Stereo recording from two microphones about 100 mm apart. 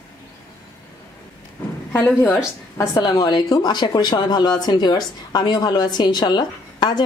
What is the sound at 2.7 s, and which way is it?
A woman's voice, 35° left (ahead or behind).